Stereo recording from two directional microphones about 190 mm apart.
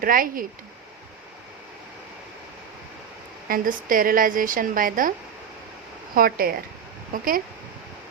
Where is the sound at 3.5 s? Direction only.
45° right (ahead or behind).